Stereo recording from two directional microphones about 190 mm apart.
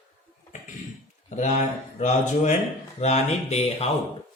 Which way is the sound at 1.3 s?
40° left (ahead or behind).